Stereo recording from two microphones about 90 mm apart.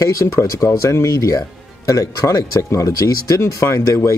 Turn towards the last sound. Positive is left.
turn(degrees=30)  # may be behind; listen again after turning